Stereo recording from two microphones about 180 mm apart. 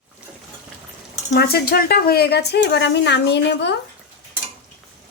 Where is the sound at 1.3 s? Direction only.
60° left (ahead or behind).